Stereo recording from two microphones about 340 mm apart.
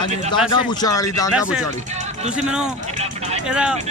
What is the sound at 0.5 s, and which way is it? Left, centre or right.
Speech, centre.